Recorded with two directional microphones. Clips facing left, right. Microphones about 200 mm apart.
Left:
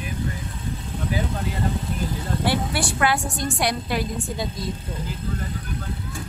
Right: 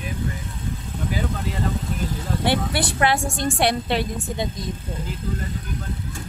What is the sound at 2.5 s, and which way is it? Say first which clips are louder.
A woman's voice: right 2 dB; 25° right (ahead or behind).